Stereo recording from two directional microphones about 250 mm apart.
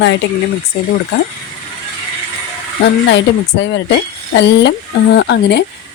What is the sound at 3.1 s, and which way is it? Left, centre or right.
Speech, left.